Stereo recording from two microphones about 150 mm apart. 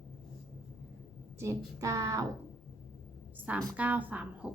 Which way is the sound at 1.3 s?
20° right (ahead or behind).